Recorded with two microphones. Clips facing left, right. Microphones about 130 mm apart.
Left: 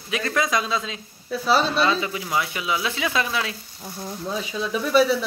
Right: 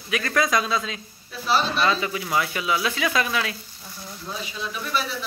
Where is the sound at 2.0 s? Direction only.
20° left (ahead or behind).